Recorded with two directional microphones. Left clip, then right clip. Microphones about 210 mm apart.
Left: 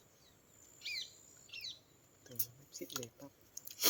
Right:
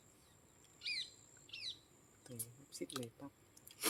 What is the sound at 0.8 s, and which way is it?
Bird, 50° right (ahead or behind).